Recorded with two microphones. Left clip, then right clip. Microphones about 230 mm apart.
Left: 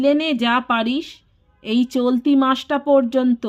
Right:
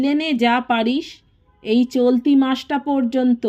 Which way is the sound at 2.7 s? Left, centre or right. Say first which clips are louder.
Left 1 dB; centre.